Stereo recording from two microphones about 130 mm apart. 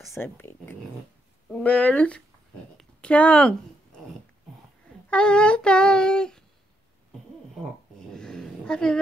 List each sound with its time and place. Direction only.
0.1 s child singing: 20° left (ahead or behind)
2.8 s speech: 10° left (ahead or behind)
5.1 s child singing: 5° left (ahead or behind)
8.1 s a sound: 5° left (ahead or behind)